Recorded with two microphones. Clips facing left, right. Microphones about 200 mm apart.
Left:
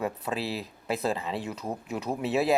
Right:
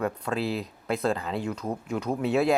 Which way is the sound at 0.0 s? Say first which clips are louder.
Right 3 dB; 5° left (ahead or behind).